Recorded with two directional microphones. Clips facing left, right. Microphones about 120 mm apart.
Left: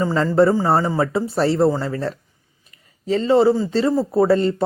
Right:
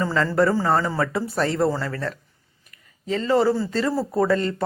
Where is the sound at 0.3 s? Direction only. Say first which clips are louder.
Left 5 dB; 20° left (ahead or behind).